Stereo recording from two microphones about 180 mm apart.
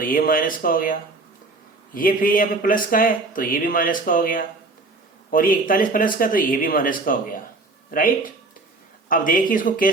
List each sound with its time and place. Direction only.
0.0 s speech: 50° left (ahead or behind)